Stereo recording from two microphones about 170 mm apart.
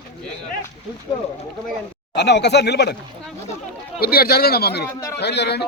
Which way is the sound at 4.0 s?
65° left (ahead or behind).